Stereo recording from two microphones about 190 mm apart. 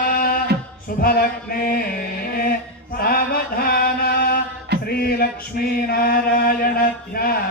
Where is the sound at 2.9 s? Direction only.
55° left (ahead or behind).